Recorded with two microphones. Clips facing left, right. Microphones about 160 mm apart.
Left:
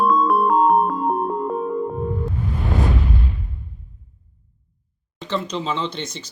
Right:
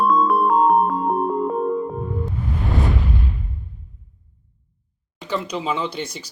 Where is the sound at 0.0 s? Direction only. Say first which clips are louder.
Even; centre (ahead or behind).